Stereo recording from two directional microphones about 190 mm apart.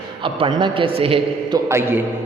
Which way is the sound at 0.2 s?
25° right (ahead or behind).